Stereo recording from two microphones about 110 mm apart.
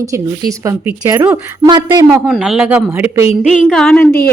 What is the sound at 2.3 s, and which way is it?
Speech, 5° right (ahead or behind).